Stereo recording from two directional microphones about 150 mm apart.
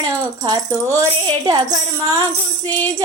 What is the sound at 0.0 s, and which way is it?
Rattle, 30° right (ahead or behind).